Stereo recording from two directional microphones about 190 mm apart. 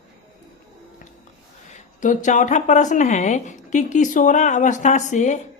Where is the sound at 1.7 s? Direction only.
40° left (ahead or behind).